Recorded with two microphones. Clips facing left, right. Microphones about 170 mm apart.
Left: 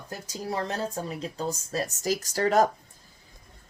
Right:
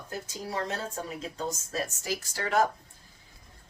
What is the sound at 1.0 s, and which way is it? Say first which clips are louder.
Speech: left 3 dB; 35° left (ahead or behind).